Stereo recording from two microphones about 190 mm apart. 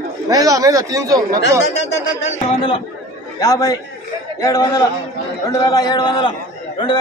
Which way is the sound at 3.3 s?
20° left (ahead or behind).